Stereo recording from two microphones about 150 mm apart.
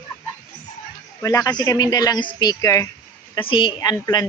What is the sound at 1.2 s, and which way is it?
Speech, 25° left (ahead or behind).